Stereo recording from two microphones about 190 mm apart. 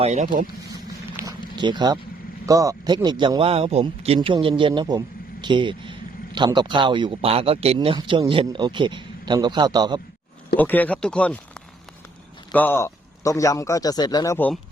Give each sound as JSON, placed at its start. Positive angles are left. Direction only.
{"t": 0.0, "sound": "speech", "side_deg": -35}
{"t": 1.1, "sound": "a sound", "side_deg": -20}
{"t": 2.5, "sound": "speech", "side_deg": -15}
{"t": 10.6, "sound": "speech", "side_deg": 10}
{"t": 12.5, "sound": "speech", "side_deg": 10}
{"t": 14.3, "sound": "speech", "side_deg": 10}